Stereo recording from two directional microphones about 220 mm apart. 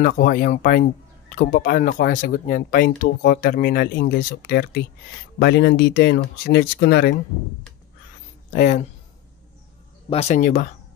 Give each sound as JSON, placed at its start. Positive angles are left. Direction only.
{"t": 0.0, "sound": "speech", "side_deg": 40}
{"t": 8.5, "sound": "speech", "side_deg": 35}
{"t": 10.0, "sound": "speech", "side_deg": 30}